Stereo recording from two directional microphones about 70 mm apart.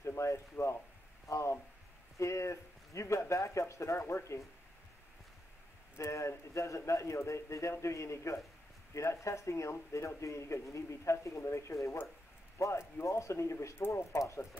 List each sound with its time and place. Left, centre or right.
0.0 s speech: left
5.9 s speech: left
13.7 s speech: left
14.2 s speech: left